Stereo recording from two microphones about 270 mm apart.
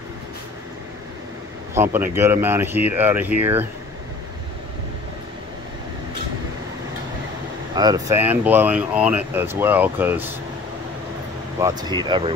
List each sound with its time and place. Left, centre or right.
1.8 s speech: centre
7.7 s speech: centre
11.6 s speech: centre